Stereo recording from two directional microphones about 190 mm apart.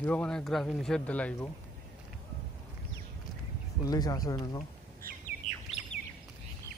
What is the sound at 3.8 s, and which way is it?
Speech, 20° left (ahead or behind).